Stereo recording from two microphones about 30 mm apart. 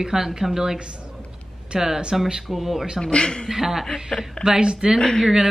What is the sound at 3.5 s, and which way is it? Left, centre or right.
Speech, centre.